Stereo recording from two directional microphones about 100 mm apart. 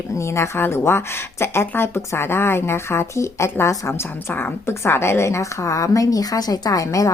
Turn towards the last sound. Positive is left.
turn(degrees=35)  # may be behind; listen again after turning